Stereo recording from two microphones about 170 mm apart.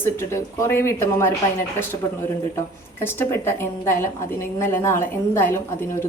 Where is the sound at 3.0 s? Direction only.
15° left (ahead or behind).